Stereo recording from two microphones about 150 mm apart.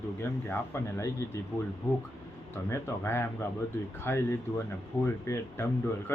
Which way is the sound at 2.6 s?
20° left (ahead or behind).